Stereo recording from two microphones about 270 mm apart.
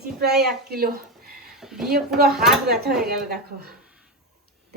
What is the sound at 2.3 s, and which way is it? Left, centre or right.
Speech, centre.